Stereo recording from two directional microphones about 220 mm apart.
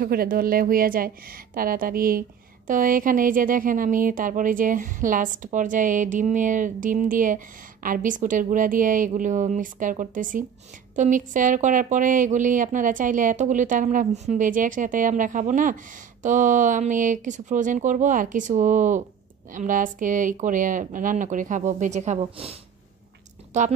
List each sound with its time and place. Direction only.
0.0 s a woman's voice: 45° right (ahead or behind)